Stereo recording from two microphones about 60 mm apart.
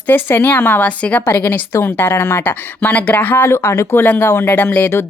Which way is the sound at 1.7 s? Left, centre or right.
Left.